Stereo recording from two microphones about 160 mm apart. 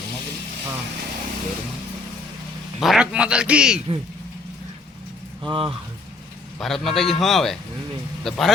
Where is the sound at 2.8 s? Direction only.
5° right (ahead or behind).